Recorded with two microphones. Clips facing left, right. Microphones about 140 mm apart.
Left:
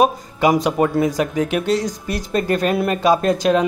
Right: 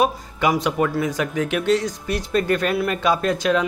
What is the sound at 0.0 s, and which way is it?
Speech, 40° left (ahead or behind).